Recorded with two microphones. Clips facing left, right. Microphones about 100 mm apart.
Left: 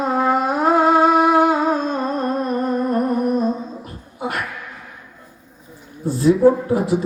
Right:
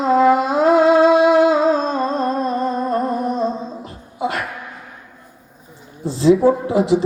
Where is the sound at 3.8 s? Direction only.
90° right.